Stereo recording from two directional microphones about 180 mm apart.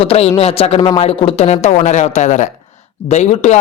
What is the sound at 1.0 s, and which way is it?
Speech, 35° left (ahead or behind).